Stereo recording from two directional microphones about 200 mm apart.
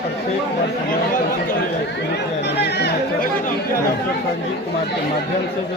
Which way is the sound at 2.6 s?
55° left (ahead or behind).